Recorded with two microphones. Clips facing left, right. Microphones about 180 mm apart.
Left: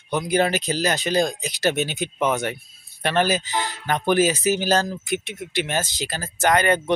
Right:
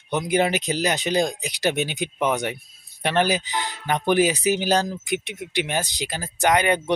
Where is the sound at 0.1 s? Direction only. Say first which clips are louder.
Even; 20° right (ahead or behind).